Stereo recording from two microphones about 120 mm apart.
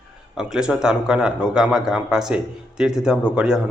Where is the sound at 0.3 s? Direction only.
5° right (ahead or behind).